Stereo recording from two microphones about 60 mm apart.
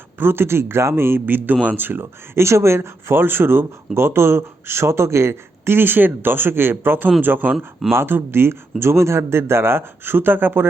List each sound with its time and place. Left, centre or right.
0.2 s speech: right
7.5 s speech: centre
7.9 s speech: right